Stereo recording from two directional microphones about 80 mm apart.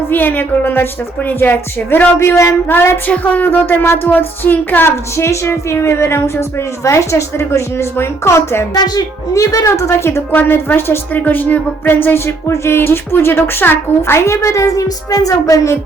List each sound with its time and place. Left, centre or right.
0.1 s speech: left
6.8 s music: left
8.7 s music: left